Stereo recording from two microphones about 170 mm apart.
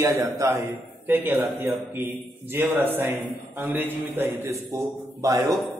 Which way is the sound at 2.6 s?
10° right (ahead or behind).